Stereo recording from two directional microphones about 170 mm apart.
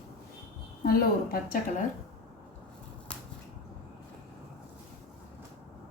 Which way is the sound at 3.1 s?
5° left (ahead or behind).